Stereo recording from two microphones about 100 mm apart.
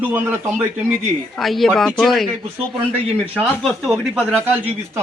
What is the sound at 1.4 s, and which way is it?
Speech, centre (ahead or behind).